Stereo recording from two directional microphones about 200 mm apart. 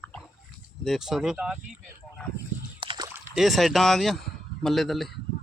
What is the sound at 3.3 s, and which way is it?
A man's voice, centre (ahead or behind).